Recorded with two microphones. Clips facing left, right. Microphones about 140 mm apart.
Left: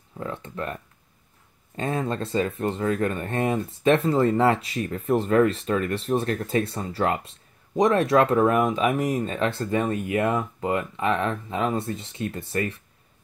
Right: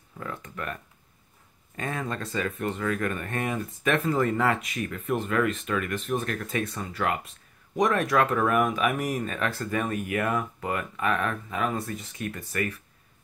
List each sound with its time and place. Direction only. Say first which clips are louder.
0.2 s speech: left 4 dB; 25° left (ahead or behind)